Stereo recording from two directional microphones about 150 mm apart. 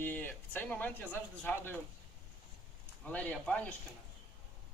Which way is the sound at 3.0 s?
10° left (ahead or behind).